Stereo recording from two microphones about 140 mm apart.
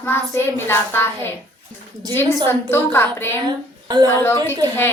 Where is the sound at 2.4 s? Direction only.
15° left (ahead or behind).